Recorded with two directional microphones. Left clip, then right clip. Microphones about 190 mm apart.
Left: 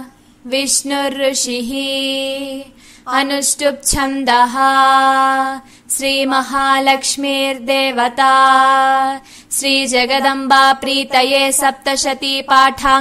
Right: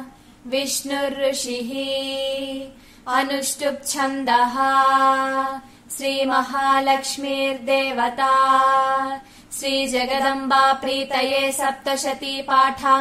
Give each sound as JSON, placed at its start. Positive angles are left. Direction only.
{"t": 0.5, "sound": "music", "side_deg": 35}
{"t": 3.2, "sound": "music", "side_deg": 35}